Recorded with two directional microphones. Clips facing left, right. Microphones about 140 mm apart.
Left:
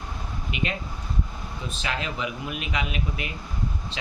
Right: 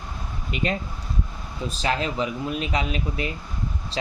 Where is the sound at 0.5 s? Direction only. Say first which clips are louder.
Right 4 dB; 40° right (ahead or behind).